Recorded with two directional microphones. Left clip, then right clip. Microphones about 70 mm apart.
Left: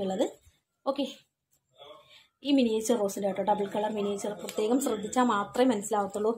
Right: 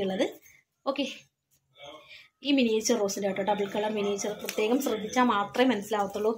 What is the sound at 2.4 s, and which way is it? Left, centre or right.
A woman's voice, left.